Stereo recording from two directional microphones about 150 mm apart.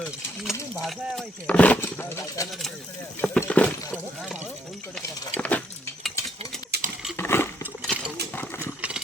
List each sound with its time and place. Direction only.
0.4 s speech: centre (ahead or behind)
5.4 s cutlery: 10° left (ahead or behind)
6.7 s patter: 90° right
7.2 s a sound: 15° left (ahead or behind)